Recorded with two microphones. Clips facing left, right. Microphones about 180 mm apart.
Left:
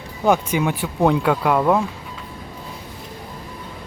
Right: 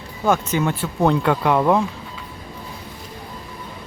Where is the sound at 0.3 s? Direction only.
15° left (ahead or behind).